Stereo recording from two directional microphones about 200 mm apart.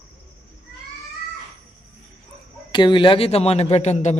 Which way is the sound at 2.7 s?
25° left (ahead or behind).